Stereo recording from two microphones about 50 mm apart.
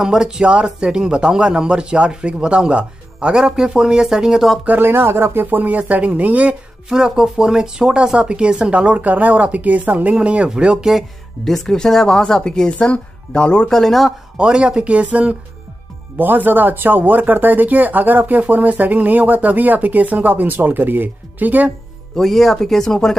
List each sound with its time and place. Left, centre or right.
0.0 s speech: centre
4.8 s speech: right
6.9 s speech: centre
11.4 s speech: centre
13.7 s speech: centre
14.3 s speech: centre
16.2 s speech: right
22.1 s speech: centre